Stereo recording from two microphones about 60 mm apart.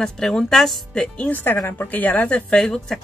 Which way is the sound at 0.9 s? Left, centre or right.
Centre.